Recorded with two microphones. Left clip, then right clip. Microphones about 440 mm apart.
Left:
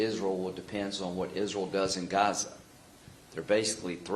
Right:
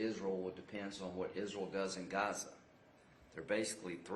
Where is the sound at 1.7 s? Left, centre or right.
Left.